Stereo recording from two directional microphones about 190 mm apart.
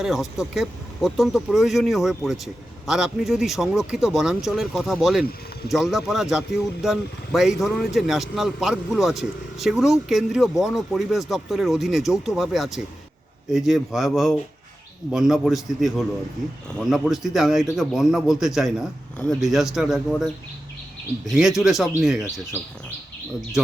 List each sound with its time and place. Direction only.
0.0 s speech: centre (ahead or behind)
21.3 s speech: 5° right (ahead or behind)